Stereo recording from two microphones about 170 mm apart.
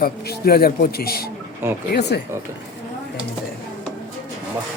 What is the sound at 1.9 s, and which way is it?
Speech, 75° left (ahead or behind).